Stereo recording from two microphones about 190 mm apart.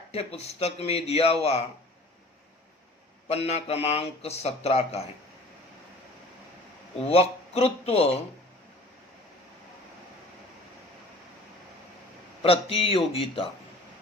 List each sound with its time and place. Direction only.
0.1 s speech: 30° left (ahead or behind)
3.2 s speech: 35° left (ahead or behind)
7.0 s speech: 30° left (ahead or behind)
12.4 s a man's voice: 30° left (ahead or behind)